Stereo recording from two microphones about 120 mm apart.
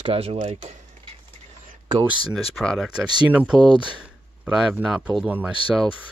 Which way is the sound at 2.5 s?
Centre (ahead or behind).